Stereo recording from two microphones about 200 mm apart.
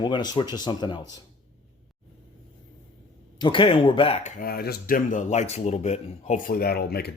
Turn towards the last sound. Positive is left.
turn(degrees=55)  # may be behind; listen again after turning